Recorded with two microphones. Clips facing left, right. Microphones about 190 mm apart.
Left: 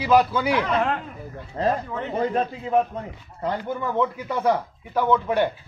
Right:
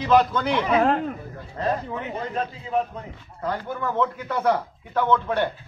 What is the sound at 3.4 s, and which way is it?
A man's voice, 20° left (ahead or behind).